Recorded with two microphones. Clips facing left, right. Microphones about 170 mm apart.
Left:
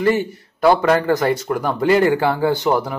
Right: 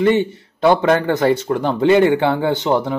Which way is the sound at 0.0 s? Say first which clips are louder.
Right 3 dB; 25° right (ahead or behind).